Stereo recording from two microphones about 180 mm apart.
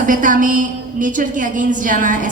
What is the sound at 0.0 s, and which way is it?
A woman's voice, 50° right (ahead or behind).